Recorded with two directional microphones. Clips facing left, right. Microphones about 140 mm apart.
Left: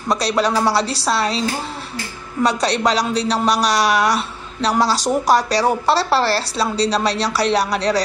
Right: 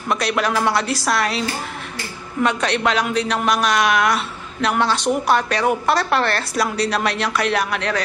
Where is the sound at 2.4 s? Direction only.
35° left (ahead or behind).